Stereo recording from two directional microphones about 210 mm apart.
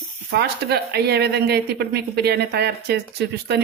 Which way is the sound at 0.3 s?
50° right (ahead or behind).